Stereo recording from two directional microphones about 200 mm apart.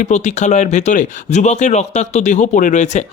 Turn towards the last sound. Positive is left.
turn(degrees=35)  # may be behind; listen again after turning